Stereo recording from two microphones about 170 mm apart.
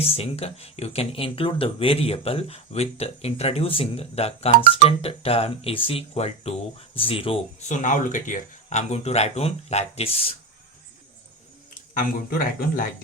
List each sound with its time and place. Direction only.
0.0 s speech: 35° left (ahead or behind)
11.7 s speech: 55° left (ahead or behind)